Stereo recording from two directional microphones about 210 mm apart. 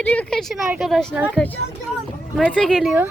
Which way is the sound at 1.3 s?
10° left (ahead or behind).